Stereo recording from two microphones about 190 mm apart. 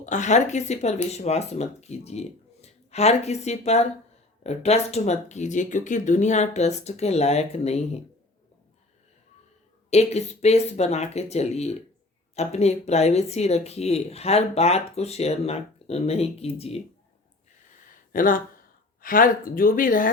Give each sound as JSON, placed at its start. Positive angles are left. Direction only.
{"t": 0.0, "sound": "speech", "side_deg": 40}
{"t": 9.9, "sound": "speech", "side_deg": 35}
{"t": 18.1, "sound": "speech", "side_deg": 45}